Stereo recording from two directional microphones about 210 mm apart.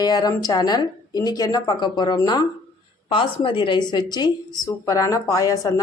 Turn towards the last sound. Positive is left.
turn(degrees=15)  # may be behind; listen again after turning